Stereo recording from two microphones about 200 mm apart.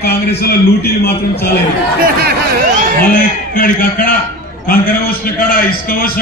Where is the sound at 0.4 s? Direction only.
50° left (ahead or behind).